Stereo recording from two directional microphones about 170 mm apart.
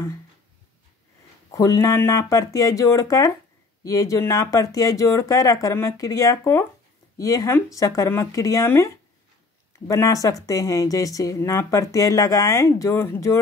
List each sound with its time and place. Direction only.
1.5 s speech: 20° left (ahead or behind)